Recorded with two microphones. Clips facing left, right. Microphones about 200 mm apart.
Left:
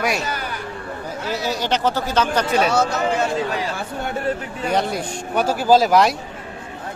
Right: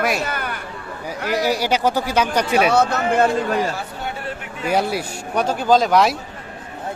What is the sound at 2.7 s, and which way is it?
Speech, 55° right (ahead or behind).